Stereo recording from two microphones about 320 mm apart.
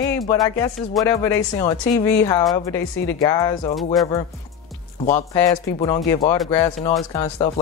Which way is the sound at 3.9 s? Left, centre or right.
Centre.